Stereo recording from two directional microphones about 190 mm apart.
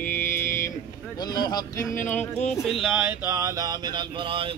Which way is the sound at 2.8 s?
5° right (ahead or behind).